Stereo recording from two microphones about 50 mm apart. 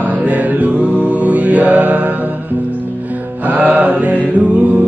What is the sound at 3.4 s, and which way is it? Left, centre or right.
Music, right.